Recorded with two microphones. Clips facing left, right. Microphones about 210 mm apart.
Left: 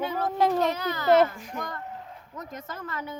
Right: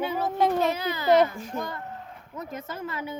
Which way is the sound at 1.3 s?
25° right (ahead or behind).